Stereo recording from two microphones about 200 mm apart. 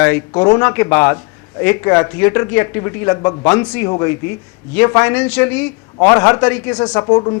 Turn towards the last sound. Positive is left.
turn(degrees=25)  # may be behind; listen again after turning